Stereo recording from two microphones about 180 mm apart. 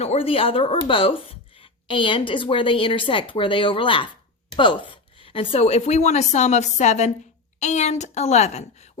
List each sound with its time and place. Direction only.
0.0 s a woman's voice: 35° left (ahead or behind)